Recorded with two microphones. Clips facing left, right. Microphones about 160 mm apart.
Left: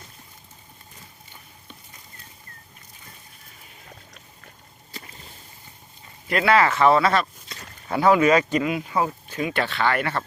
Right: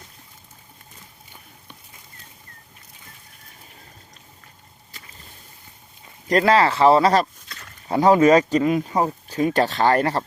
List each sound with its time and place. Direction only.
6.2 s speech: 40° right (ahead or behind)